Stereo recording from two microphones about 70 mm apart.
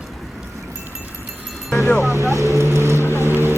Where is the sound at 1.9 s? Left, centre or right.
Right.